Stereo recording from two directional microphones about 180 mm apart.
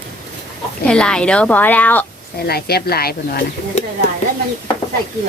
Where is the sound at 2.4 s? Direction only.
60° left (ahead or behind).